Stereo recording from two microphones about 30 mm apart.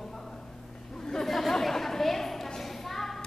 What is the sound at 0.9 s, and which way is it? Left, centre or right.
Chatter, left.